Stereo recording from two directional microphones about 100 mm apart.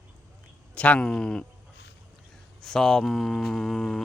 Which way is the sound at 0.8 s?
10° left (ahead or behind).